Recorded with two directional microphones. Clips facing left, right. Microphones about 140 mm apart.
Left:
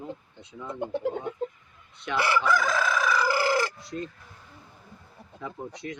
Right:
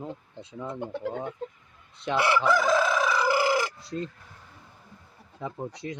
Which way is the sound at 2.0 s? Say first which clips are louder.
Right 2 dB; 25° right (ahead or behind).